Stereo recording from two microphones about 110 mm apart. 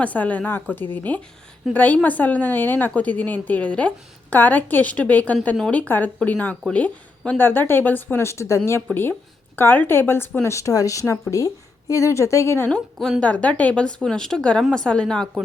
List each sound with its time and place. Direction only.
0.0 s a woman's voice: 15° left (ahead or behind)
12.7 s a woman's voice: 5° left (ahead or behind)